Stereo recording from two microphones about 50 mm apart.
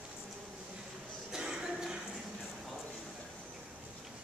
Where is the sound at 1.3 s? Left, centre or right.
Centre.